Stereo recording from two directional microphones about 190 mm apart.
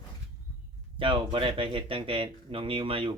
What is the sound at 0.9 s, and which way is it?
Speech, 25° right (ahead or behind).